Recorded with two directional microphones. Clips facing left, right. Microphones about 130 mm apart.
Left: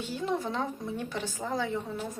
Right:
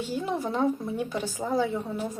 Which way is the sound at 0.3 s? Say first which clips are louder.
Right 5 dB; 10° right (ahead or behind).